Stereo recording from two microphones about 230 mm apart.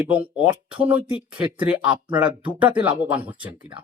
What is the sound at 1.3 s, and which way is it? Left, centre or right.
Speech, right.